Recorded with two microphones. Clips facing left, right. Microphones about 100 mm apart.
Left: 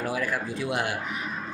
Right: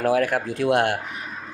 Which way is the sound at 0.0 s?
60° right (ahead or behind).